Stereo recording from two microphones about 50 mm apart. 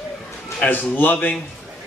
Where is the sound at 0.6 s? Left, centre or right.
Left.